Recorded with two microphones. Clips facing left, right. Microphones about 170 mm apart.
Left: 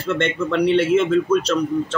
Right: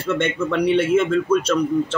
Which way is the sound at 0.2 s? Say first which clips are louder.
Left 3 dB; 5° right (ahead or behind).